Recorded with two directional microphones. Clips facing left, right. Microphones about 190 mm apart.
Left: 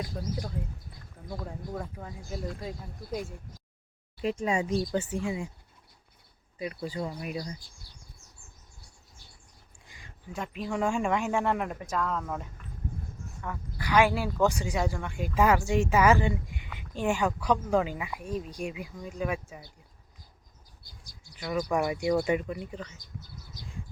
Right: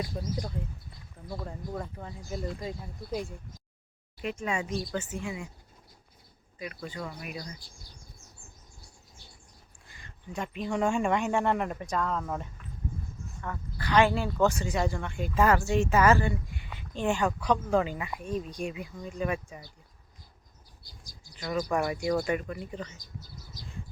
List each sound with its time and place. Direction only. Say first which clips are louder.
0.1 s speech: even; 5° right (ahead or behind)
4.2 s speech: left 4 dB; 30° left (ahead or behind)
6.6 s speech: left 4 dB; 30° left (ahead or behind)
9.8 s a sound: even; 15° left (ahead or behind)
10.3 s speech: right 1 dB; centre (ahead or behind)
13.4 s a woman's voice: even; 10° left (ahead or behind)
20.8 s bird: right 1 dB; 60° left (ahead or behind)
21.3 s a woman's voice: left 1 dB; 10° left (ahead or behind)
23.0 s speech: left 1 dB; 60° left (ahead or behind)